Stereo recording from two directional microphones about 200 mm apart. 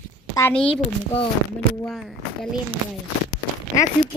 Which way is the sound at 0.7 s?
30° left (ahead or behind).